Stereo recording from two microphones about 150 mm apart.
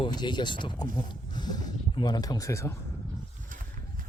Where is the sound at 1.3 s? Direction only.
30° left (ahead or behind).